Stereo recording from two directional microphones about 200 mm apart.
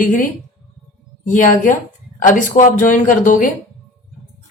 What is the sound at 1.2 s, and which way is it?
A woman's voice, 40° left (ahead or behind).